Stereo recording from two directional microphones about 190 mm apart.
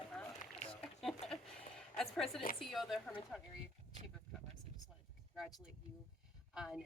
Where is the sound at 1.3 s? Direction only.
Centre (ahead or behind).